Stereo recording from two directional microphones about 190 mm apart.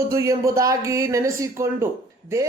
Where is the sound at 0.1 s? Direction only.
15° right (ahead or behind).